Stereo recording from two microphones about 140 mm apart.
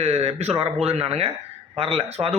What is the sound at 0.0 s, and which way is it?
A man's voice, 50° right (ahead or behind).